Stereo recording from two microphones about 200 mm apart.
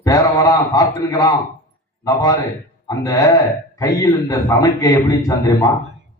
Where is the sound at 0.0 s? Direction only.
15° left (ahead or behind).